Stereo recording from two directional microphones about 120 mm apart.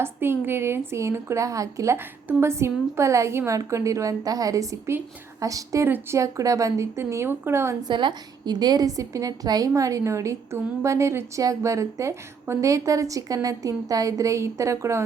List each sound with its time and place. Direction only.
0.0 s a woman's voice: 20° right (ahead or behind)
7.9 s a woman's voice: 40° right (ahead or behind); by 15.0 s 25° right (ahead or behind)